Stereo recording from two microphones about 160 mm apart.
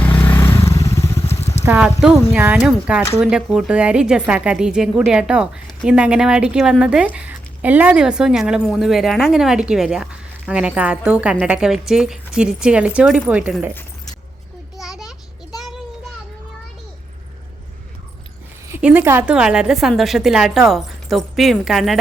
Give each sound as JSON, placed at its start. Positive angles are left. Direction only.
{"t": 0.0, "sound": "vehicle", "side_deg": 10}
{"t": 1.4, "sound": "clip-clop", "side_deg": 40}
{"t": 1.8, "sound": "speech", "side_deg": -5}
{"t": 14.8, "sound": "a sound", "side_deg": -5}
{"t": 18.8, "sound": "speech", "side_deg": -10}